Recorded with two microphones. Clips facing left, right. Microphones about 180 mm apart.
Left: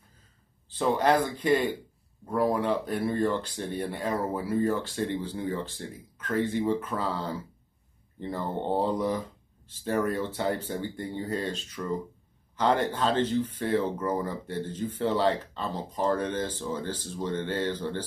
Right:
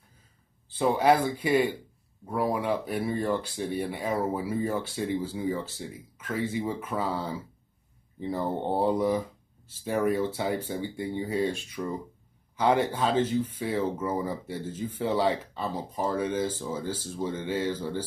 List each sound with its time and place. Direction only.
0.7 s speech: 10° right (ahead or behind)